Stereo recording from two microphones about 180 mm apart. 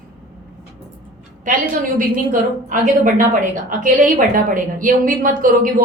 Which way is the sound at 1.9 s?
50° right (ahead or behind).